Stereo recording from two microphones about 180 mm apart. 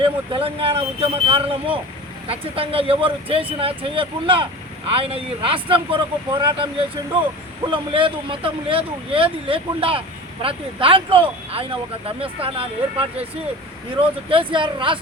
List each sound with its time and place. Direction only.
0.0 s speech: 30° right (ahead or behind)